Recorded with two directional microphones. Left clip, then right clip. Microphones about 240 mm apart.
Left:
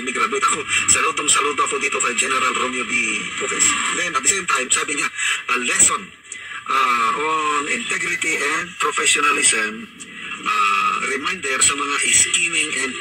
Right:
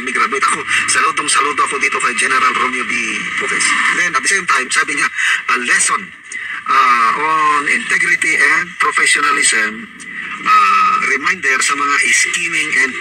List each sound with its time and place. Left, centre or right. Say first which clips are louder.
0.1 s speech: right 5 dB; right
6.8 s speech: right 6 dB; right
10.4 s music: right 7 dB; right
11.2 s a man's voice: right 6 dB; right